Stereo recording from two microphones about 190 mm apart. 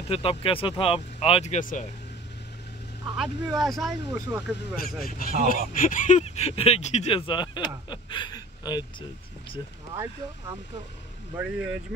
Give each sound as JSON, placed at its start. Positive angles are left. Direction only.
{"t": 0.1, "sound": "speech", "side_deg": 30}
{"t": 3.5, "sound": "speech", "side_deg": 0}
{"t": 4.1, "sound": "speech", "side_deg": -10}
{"t": 4.8, "sound": "speech", "side_deg": 50}
{"t": 11.3, "sound": "speech", "side_deg": -5}